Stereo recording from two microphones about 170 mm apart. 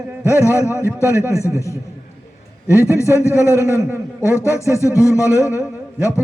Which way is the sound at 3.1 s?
15° left (ahead or behind).